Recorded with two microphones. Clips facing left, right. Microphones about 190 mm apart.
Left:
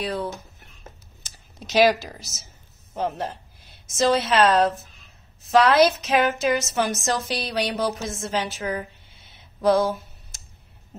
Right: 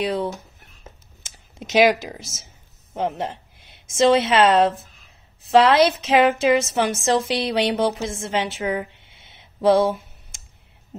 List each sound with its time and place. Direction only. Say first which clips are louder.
0.0 s speech: right 4 dB; 25° right (ahead or behind)
1.6 s speech: right 2 dB; 20° right (ahead or behind)
2.3 s speech: right 3 dB; 50° right (ahead or behind)
2.9 s a woman's voice: right 2 dB; 20° right (ahead or behind)